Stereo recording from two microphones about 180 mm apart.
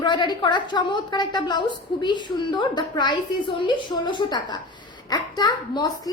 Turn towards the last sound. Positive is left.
turn(degrees=20)  # may be behind; listen again after turning